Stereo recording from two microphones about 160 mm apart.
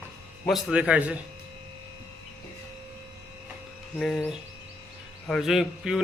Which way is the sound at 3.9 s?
5° left (ahead or behind).